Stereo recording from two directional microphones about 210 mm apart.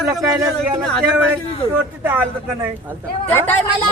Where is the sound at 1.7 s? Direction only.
10° right (ahead or behind).